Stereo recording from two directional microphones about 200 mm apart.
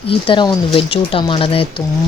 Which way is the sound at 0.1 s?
25° left (ahead or behind).